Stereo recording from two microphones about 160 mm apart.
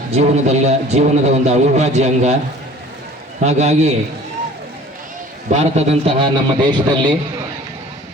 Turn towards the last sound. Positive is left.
turn(degrees=-30)  # may be behind; listen again after turning